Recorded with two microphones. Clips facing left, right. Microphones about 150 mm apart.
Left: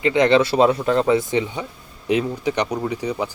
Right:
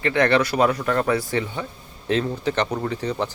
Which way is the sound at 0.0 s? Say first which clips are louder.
Left 3 dB; 20° left (ahead or behind).